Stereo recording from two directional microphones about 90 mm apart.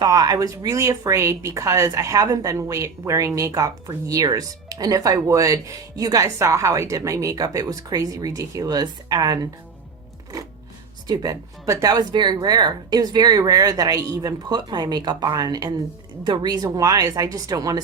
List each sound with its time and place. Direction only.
0.0 s a woman's voice: 45° right (ahead or behind)
11.1 s speech: 40° right (ahead or behind)